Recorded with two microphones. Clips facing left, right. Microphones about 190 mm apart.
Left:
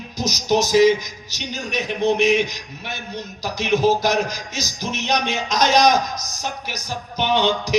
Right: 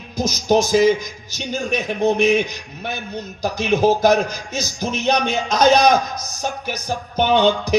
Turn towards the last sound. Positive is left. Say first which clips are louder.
# right 4 dB
turn(degrees=-55)  # may be behind; listen again after turning